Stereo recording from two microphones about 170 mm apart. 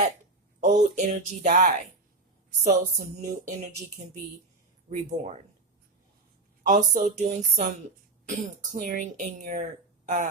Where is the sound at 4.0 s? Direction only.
40° right (ahead or behind).